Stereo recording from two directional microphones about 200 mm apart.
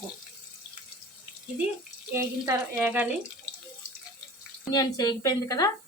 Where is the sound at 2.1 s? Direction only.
15° right (ahead or behind).